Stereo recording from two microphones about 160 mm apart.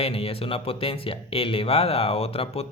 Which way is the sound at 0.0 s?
35° left (ahead or behind).